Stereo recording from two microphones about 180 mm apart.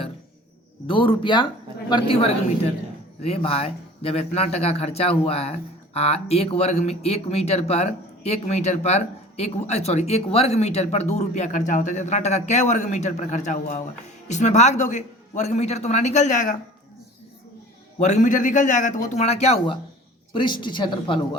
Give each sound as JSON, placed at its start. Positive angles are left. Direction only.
{"t": 0.9, "sound": "a man's voice", "side_deg": 30}
{"t": 18.0, "sound": "a man's voice", "side_deg": 40}
{"t": 20.3, "sound": "speech", "side_deg": 25}